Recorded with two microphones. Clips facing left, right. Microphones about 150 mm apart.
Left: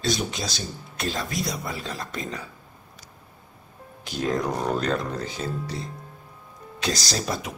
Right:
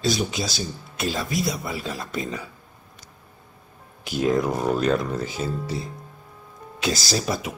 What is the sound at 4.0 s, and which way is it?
Speech, 10° right (ahead or behind).